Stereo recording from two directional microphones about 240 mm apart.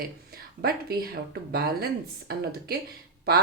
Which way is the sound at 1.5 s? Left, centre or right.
Right.